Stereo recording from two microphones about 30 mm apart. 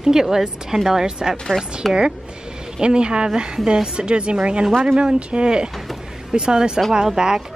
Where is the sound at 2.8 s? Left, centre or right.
Right.